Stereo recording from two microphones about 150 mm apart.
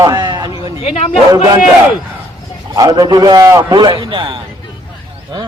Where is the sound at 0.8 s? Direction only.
45° left (ahead or behind).